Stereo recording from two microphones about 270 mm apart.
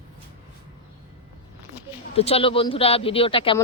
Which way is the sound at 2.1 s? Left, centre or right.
Left.